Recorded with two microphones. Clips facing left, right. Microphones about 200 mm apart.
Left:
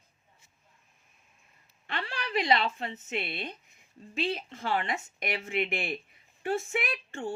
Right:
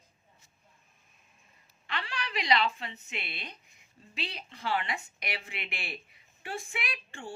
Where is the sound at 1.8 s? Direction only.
50° left (ahead or behind).